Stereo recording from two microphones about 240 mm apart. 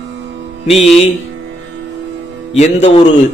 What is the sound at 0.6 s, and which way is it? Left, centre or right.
Speech, left.